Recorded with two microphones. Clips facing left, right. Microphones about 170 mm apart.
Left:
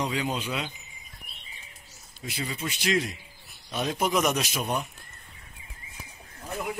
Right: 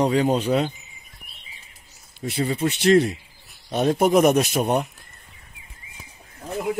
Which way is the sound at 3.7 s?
55° right (ahead or behind).